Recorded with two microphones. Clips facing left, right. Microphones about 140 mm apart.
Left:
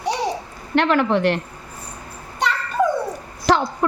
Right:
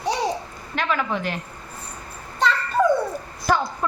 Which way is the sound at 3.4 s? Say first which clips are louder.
Left 4 dB; 80° left.